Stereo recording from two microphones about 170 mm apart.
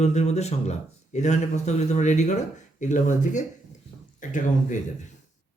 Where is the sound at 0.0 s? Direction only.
40° left (ahead or behind).